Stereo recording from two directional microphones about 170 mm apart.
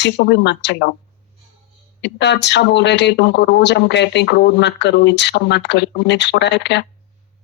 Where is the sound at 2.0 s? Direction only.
90° left.